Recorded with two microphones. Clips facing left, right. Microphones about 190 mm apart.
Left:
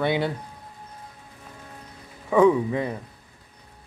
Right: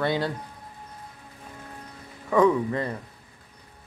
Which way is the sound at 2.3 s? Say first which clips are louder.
Left 2 dB; 10° left (ahead or behind).